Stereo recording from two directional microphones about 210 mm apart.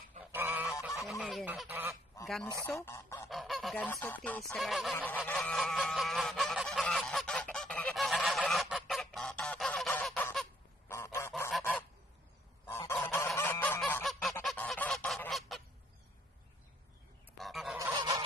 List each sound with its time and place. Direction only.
0.2 s goose: 10° right (ahead or behind)
2.8 s goose: 15° left (ahead or behind)
3.3 s goose: centre (ahead or behind)
17.4 s goose: centre (ahead or behind)
17.7 s goose: 15° right (ahead or behind)